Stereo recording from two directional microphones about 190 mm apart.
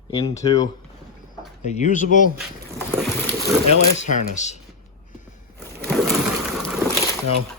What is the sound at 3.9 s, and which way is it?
Speech, 35° left (ahead or behind).